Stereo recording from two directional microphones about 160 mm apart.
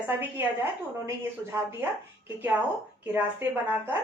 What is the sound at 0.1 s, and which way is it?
Speech, 15° right (ahead or behind).